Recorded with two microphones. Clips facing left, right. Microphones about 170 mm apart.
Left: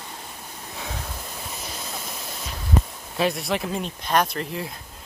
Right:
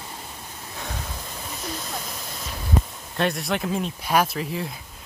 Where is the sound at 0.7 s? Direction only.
Centre (ahead or behind).